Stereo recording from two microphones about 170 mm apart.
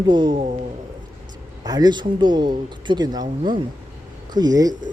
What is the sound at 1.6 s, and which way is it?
Speech, 25° right (ahead or behind).